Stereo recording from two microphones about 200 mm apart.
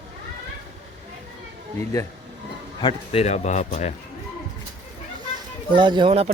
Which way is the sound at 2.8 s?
30° left (ahead or behind).